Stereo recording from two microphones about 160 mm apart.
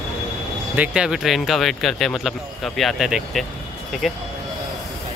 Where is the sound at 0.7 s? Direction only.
5° right (ahead or behind).